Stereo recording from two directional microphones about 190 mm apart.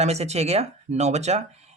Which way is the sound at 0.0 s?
35° right (ahead or behind).